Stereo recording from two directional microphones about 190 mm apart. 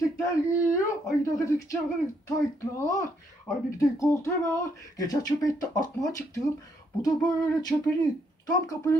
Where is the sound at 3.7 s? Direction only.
15° left (ahead or behind).